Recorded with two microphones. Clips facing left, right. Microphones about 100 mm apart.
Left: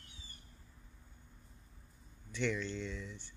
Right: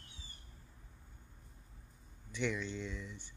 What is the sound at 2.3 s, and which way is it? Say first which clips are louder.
Speech: left 1 dB; 10° right (ahead or behind).